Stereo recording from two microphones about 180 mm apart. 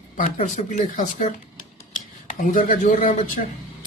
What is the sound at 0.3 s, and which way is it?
Speech, 40° left (ahead or behind).